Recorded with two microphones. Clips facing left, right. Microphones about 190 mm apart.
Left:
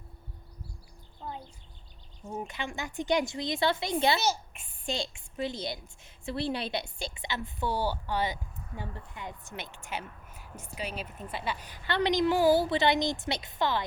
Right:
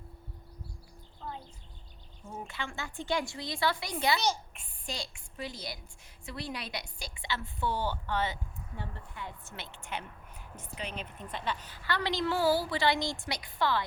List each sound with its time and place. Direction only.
1.2 s a sound: 15° left (ahead or behind)
2.2 s a woman's voice: 20° left (ahead or behind)
4.2 s a child's voice: 5° left (ahead or behind)
4.9 s a woman's voice: 25° left (ahead or behind)